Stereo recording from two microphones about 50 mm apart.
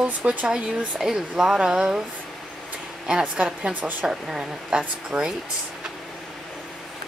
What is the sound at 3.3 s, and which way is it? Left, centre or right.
Speech, right.